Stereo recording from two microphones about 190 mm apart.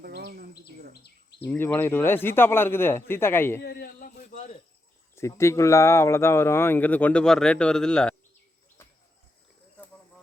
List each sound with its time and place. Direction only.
0.0 s bird: 55° right (ahead or behind)
1.5 s a man's voice: 10° left (ahead or behind)
3.6 s a sound: 55° left (ahead or behind)
5.1 s a man's voice: 15° left (ahead or behind)